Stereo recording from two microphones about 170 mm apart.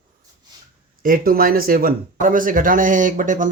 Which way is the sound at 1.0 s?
55° right (ahead or behind).